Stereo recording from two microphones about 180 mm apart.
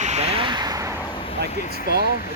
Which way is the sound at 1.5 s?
45° left (ahead or behind).